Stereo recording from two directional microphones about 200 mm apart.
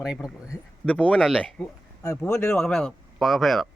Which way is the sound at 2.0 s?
15° left (ahead or behind).